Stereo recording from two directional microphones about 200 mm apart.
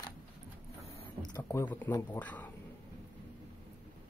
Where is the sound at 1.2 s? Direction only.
15° left (ahead or behind).